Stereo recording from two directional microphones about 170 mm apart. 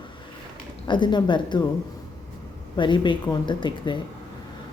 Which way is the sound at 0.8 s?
25° left (ahead or behind).